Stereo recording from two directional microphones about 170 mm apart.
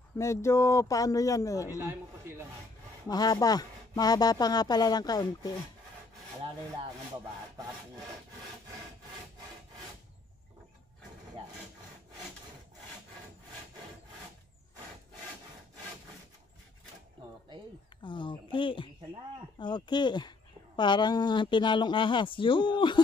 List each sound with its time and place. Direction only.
0.2 s speech: 15° left (ahead or behind)
1.8 s a sound: 15° right (ahead or behind)
3.1 s speech: 25° left (ahead or behind)
18.0 s speech: 25° left (ahead or behind)